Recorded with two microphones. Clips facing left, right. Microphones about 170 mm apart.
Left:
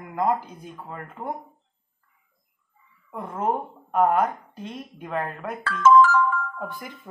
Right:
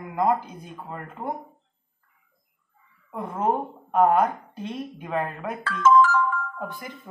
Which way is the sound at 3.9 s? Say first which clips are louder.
Right 1 dB; 25° right (ahead or behind).